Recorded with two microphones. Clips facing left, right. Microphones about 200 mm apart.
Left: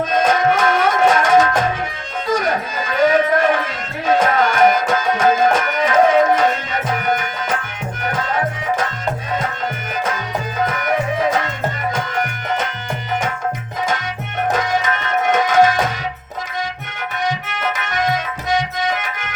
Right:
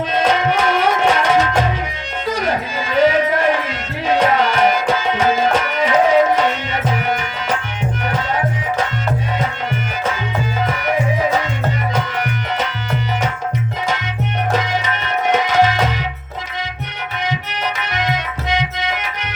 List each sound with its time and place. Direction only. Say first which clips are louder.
0.1 s music: left 1 dB; 45° left (ahead or behind)
3.0 s music: even; 45° left (ahead or behind)
4.0 s tabla: even; 45° left (ahead or behind)
11.9 s music: right 1 dB; 45° left (ahead or behind)
14.5 s music: left 2 dB; 45° left (ahead or behind)
17.9 s music: left 4 dB; 45° left (ahead or behind)